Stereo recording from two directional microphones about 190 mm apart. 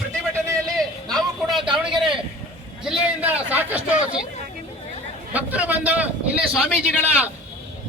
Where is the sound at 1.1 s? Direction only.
Centre (ahead or behind).